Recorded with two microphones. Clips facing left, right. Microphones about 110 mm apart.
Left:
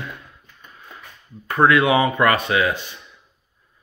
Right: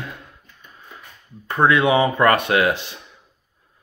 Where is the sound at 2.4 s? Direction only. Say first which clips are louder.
Right 2 dB; 60° right (ahead or behind); by 2.9 s 80° right.